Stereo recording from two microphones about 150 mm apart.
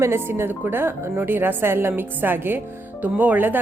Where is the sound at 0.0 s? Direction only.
15° right (ahead or behind).